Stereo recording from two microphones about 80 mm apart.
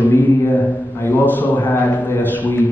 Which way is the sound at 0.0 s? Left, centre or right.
Left.